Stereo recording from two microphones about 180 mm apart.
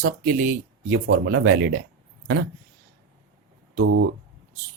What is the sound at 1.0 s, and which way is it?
Speech, 90° right.